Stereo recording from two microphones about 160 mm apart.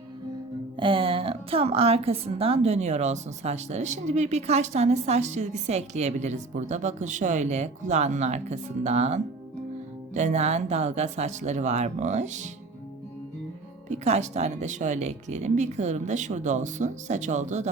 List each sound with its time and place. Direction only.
0.8 s a woman's voice: 35° right (ahead or behind)
13.9 s a woman's voice: 45° right (ahead or behind)